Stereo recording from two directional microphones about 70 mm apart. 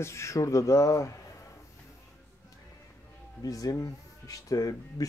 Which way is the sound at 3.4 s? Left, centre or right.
Left.